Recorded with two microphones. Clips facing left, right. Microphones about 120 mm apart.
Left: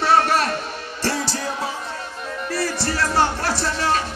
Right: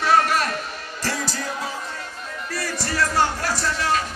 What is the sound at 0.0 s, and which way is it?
Music, 30° left (ahead or behind).